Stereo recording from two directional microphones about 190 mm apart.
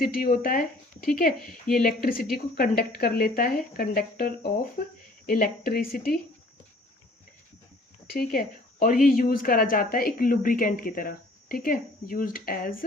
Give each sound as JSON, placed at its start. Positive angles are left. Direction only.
{"t": 0.0, "sound": "speech", "side_deg": 50}
{"t": 8.3, "sound": "speech", "side_deg": 45}